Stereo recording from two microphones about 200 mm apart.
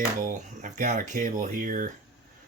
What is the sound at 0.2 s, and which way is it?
Speech, 40° right (ahead or behind).